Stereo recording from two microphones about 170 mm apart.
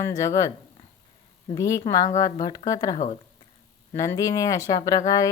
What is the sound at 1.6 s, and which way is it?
A woman's voice, 20° left (ahead or behind).